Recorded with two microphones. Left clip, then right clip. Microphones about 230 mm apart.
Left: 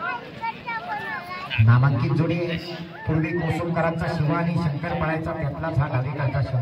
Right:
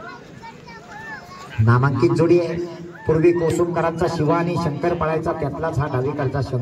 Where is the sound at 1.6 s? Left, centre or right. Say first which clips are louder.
Right 10 dB; right.